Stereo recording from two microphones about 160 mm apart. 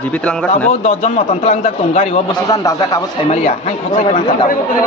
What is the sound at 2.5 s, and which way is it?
Speech, 25° left (ahead or behind).